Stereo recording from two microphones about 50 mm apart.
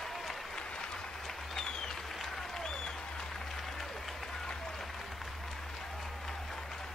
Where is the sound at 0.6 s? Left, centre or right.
Centre.